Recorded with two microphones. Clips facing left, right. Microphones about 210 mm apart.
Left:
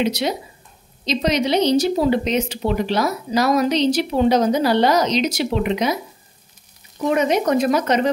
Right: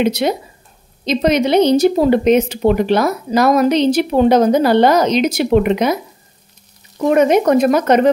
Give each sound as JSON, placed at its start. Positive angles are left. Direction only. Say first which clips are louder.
{"t": 0.0, "sound": "a woman's voice", "louder": "right 5 dB", "side_deg": -55}
{"t": 7.0, "sound": "a woman's voice", "louder": "right 6 dB", "side_deg": -55}